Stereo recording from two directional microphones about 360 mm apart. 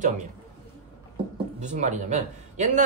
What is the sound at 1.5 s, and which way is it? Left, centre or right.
Speech, centre.